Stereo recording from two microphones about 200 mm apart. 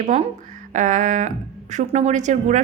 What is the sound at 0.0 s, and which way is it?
Speech, 35° right (ahead or behind).